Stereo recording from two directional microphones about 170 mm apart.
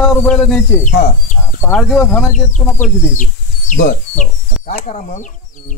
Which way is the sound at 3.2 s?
50° left (ahead or behind).